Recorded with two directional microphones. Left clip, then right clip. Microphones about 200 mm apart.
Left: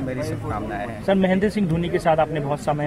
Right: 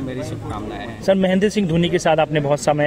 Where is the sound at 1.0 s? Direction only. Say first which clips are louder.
Right 4 dB; 55° right (ahead or behind).